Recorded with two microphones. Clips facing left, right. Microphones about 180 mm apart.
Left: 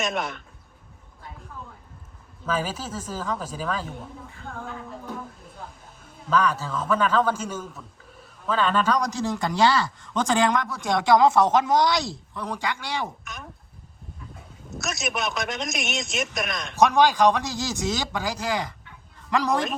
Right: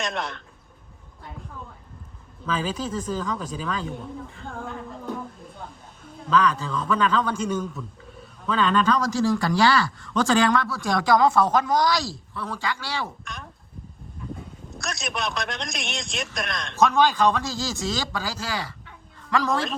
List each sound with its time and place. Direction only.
0.0 s a man's voice: centre (ahead or behind)
2.7 s a man's voice: 5° left (ahead or behind)
6.4 s speech: 5° left (ahead or behind)
14.7 s a man's voice: centre (ahead or behind)
16.7 s a man's voice: 15° left (ahead or behind)